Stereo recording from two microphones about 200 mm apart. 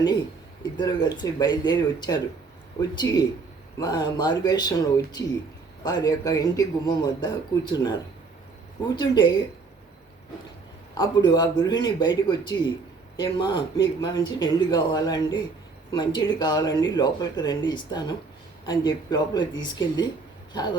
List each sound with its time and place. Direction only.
0.8 s speech: 20° left (ahead or behind)
9.0 s speech: 20° left (ahead or behind)
10.9 s speech: 20° left (ahead or behind)